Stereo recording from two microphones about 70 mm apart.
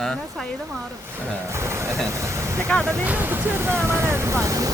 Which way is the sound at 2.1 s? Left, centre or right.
Right.